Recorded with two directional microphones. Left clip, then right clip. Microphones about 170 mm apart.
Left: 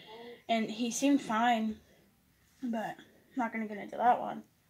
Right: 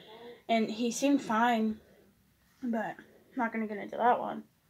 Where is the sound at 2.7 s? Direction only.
5° left (ahead or behind).